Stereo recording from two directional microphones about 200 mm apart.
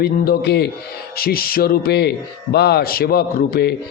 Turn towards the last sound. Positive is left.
turn(degrees=55)  # may be behind; listen again after turning